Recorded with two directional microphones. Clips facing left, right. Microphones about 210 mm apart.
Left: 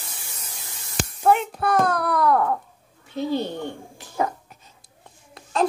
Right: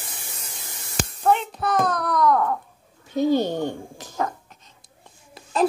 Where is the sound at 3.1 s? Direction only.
45° right (ahead or behind).